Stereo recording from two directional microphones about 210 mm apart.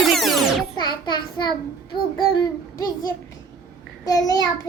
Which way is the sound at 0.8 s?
20° left (ahead or behind).